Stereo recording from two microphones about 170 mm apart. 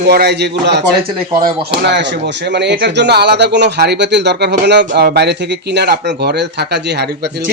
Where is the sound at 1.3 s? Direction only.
55° right (ahead or behind).